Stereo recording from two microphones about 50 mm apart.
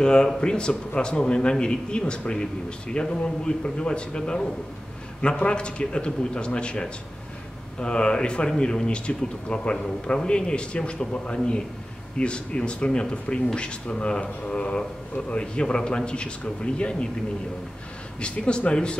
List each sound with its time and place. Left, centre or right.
0.0 s speech: centre
18.2 s speech: centre